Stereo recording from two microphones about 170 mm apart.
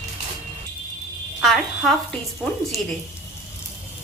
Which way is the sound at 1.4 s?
Centre (ahead or behind).